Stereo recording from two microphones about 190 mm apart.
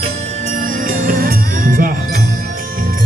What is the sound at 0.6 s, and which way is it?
Music, 45° right (ahead or behind).